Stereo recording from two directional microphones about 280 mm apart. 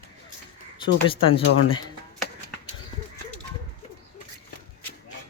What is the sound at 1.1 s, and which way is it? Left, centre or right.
Speech, centre.